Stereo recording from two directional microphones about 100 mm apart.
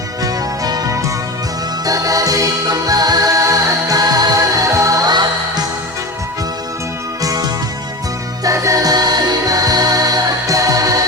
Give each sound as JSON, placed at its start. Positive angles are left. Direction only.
{"t": 0.2, "sound": "music", "side_deg": -40}
{"t": 7.2, "sound": "music", "side_deg": -35}
{"t": 8.4, "sound": "music", "side_deg": -35}